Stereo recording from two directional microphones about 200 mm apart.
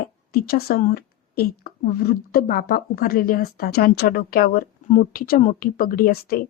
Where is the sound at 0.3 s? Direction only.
50° left (ahead or behind).